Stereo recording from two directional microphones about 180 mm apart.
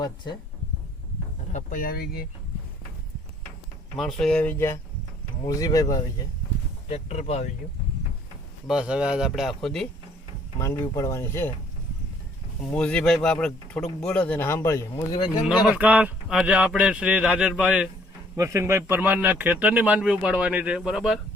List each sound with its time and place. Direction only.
1.5 s speech: 50° left (ahead or behind)
3.9 s speech: centre (ahead or behind); by 6.0 s 20° left (ahead or behind)
6.8 s speech: 35° left (ahead or behind)
8.6 s speech: 5° right (ahead or behind)
10.6 s speech: 15° left (ahead or behind)
12.7 s speech: 5° left (ahead or behind)
15.6 s speech: 5° right (ahead or behind)
18.3 s speech: 15° right (ahead or behind)